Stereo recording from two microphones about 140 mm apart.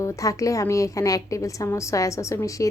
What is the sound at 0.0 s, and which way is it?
A woman's voice, 20° left (ahead or behind).